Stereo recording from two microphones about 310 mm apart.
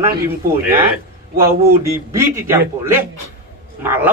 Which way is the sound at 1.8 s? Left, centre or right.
Centre.